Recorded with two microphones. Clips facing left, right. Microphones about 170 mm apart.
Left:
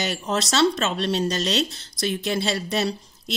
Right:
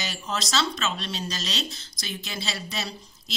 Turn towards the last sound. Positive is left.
turn(degrees=50)  # may be behind; listen again after turning